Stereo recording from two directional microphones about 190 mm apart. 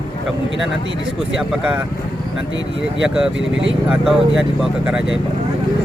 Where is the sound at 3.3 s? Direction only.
80° right.